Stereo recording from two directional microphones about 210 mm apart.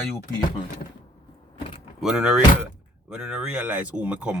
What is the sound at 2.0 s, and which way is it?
A man's voice, 5° right (ahead or behind).